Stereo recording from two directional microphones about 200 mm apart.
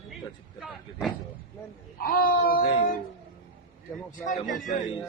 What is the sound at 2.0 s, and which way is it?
Speech, 45° left (ahead or behind).